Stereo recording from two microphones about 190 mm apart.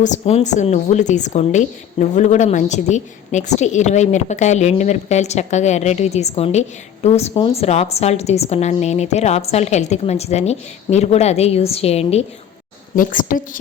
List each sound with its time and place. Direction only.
0.0 s a woman's voice: 35° left (ahead or behind)
13.0 s a woman's voice: 45° left (ahead or behind)